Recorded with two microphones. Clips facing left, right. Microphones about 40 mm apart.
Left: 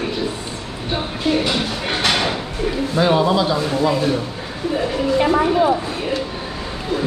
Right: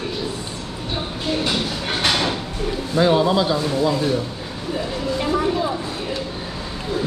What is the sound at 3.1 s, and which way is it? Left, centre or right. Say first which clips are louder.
Speech: left 1 dB; centre.